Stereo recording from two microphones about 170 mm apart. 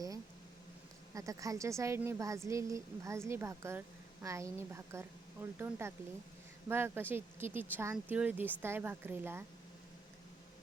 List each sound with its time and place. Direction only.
1.1 s a woman's voice: 20° right (ahead or behind)